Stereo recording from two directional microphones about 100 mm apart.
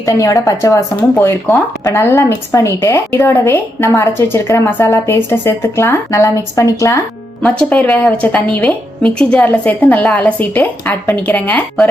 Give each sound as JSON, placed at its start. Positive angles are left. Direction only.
{"t": 0.0, "sound": "a woman's voice", "side_deg": 35}
{"t": 7.4, "sound": "a woman's voice", "side_deg": 10}